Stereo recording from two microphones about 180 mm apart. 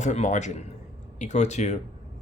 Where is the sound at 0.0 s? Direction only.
40° left (ahead or behind).